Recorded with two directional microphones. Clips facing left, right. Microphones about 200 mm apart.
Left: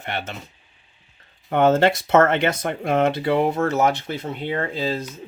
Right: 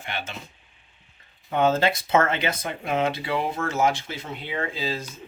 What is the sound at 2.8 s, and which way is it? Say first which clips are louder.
Speech: left 5 dB; 45° left (ahead or behind).